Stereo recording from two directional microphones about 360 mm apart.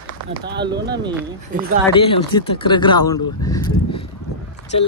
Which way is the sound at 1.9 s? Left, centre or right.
Centre.